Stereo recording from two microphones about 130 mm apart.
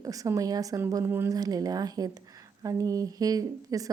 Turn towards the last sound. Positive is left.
turn(degrees=-25)  # may be behind; listen again after turning